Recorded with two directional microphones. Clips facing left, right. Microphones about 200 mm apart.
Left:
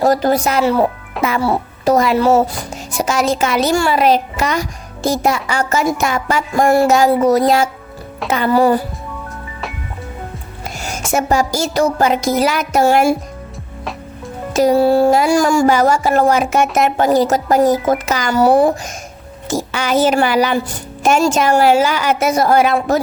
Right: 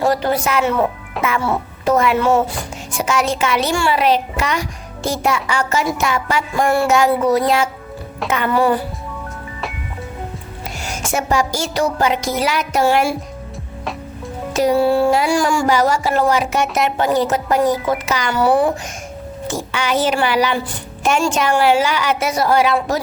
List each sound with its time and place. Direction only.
0.0 s music: 40° left (ahead or behind)
1.2 s a child's voice: 35° left (ahead or behind)
2.9 s music: 40° left (ahead or behind)
10.8 s a sound: 45° left (ahead or behind)
11.1 s speech: 40° left (ahead or behind)
14.5 s speech: 40° left (ahead or behind)